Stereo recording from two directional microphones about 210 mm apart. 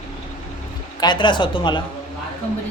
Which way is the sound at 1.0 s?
20° left (ahead or behind).